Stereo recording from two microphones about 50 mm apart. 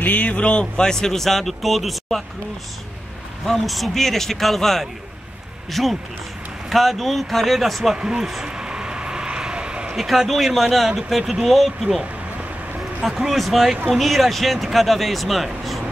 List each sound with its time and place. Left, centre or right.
0.0 s speech: left; by 2.2 s centre
3.4 s speech: centre
7.9 s speech: centre
8.5 s vehicle: centre
9.9 s speech: centre
13.0 s speech: centre